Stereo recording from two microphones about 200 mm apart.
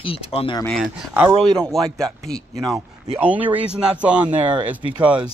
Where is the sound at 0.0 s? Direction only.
30° left (ahead or behind).